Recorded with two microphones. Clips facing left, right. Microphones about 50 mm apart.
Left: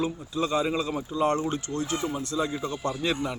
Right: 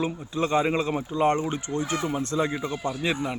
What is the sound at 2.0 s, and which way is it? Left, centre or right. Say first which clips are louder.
Speech: right 3 dB; right.